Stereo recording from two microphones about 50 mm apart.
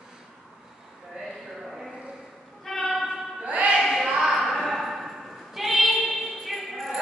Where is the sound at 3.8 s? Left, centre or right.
Centre.